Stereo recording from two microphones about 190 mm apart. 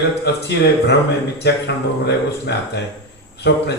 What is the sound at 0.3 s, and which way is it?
Speech, 60° left (ahead or behind).